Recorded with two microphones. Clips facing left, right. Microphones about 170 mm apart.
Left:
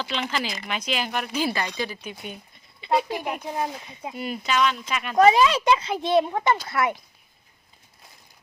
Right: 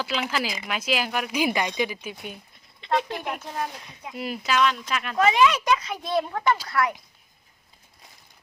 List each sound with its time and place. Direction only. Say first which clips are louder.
0.0 s speech: right 1 dB; 5° right (ahead or behind); by 3.7 s 15° left (ahead or behind)
4.1 s speech: even; centre (ahead or behind)
5.1 s speech: left 3 dB; 35° left (ahead or behind)